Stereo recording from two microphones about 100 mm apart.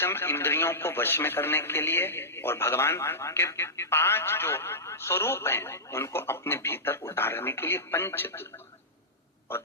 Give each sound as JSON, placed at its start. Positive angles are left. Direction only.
{"t": 0.0, "sound": "speech", "side_deg": 25}